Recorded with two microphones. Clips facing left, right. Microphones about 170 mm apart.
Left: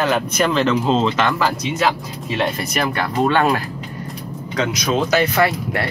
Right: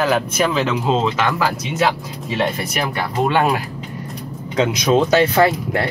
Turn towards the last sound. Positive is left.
turn(degrees=-25)  # may be behind; listen again after turning